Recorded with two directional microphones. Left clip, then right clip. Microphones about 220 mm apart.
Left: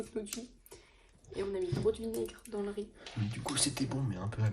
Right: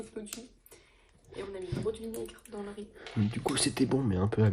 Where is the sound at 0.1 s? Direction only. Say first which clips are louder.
Left 4 dB; 30° left (ahead or behind).